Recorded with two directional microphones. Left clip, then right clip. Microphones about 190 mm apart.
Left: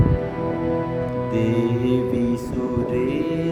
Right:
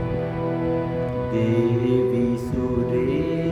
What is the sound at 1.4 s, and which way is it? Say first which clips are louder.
Music: right 1 dB; 25° left (ahead or behind).